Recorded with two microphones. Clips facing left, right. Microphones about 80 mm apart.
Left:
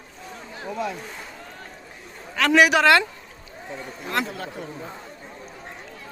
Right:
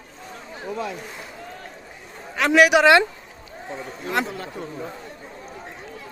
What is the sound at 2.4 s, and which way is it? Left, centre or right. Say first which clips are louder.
Speech: right 2 dB; centre.